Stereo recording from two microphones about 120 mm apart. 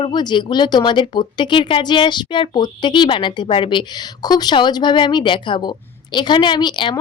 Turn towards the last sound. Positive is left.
turn(degrees=40)  # may be behind; listen again after turning